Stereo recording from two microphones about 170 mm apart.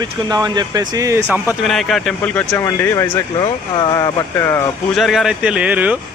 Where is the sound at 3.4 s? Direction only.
25° left (ahead or behind).